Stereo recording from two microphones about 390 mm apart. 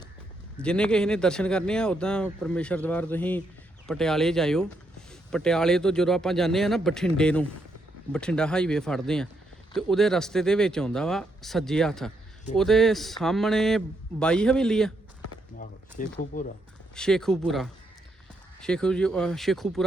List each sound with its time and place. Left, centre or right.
0.5 s speech: centre
15.5 s speech: left
16.9 s speech: centre